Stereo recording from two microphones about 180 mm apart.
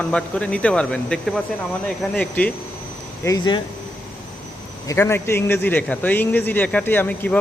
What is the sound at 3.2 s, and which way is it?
Speech, 20° left (ahead or behind).